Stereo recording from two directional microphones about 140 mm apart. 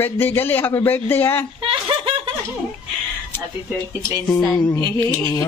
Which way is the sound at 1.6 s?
40° right (ahead or behind).